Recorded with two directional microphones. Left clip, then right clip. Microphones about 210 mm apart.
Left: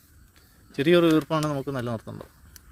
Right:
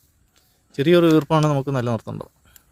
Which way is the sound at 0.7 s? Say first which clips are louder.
Right 4 dB; 15° right (ahead or behind).